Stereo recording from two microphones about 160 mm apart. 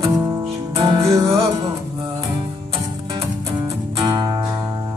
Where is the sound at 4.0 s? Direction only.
25° right (ahead or behind).